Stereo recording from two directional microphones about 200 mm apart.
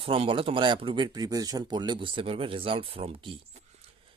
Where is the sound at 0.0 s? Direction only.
25° right (ahead or behind).